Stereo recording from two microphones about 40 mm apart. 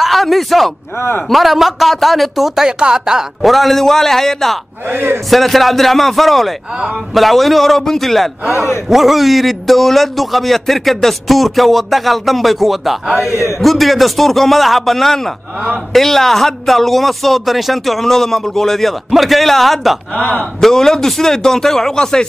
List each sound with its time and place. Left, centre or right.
0.0 s speech: centre
0.9 s speech: left
1.3 s a man's voice: centre
3.4 s speech: centre
4.8 s a man's voice: right
5.3 s a man's voice: centre
20.6 s speech: centre